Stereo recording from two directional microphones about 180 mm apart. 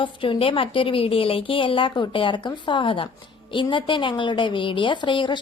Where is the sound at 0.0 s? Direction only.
30° left (ahead or behind).